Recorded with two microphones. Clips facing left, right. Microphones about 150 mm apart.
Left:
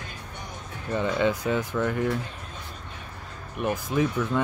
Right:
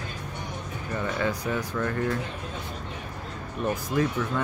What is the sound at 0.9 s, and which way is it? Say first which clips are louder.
Speech: left 4 dB; 20° left (ahead or behind).